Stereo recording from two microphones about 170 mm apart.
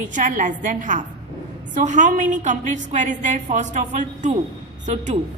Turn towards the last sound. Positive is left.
turn(degrees=-45)  # may be behind; listen again after turning